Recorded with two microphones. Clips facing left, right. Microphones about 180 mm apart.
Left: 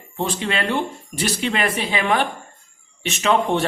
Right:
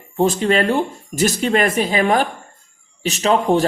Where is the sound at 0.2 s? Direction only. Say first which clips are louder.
Right 8 dB; 40° right (ahead or behind).